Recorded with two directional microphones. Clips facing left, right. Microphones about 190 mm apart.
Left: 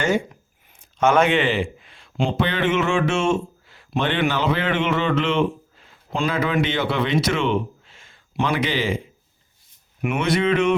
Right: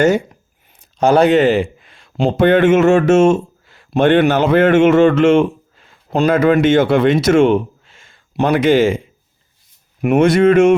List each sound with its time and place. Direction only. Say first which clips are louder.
0.9 s speech: right 7 dB; 35° right (ahead or behind)
10.0 s speech: right 10 dB; 45° right (ahead or behind)